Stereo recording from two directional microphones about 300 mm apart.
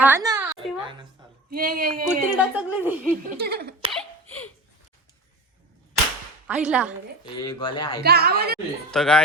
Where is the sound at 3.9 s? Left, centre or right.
Centre.